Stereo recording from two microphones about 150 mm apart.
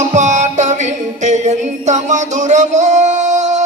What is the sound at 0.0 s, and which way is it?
Music, 50° right (ahead or behind).